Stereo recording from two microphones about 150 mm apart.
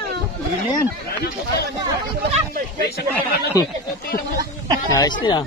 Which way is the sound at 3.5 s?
25° left (ahead or behind).